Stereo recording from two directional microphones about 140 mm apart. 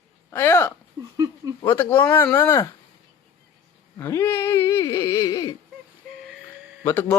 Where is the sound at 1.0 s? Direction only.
25° right (ahead or behind).